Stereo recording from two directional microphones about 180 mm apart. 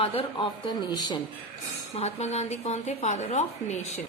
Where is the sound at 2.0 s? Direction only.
35° left (ahead or behind).